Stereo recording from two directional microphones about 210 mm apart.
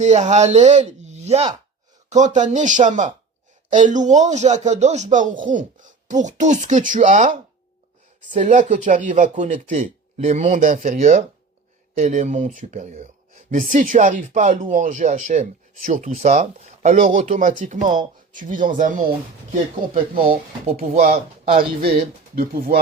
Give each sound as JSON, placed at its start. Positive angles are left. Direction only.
{"t": 0.0, "sound": "speech", "side_deg": -35}
{"t": 22.4, "sound": "speech", "side_deg": -45}